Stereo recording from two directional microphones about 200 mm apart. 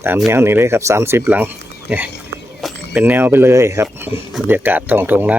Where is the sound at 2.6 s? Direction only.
Centre (ahead or behind).